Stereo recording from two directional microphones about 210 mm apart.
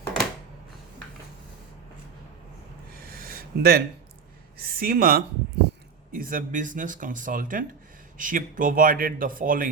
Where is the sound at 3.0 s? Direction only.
45° right (ahead or behind).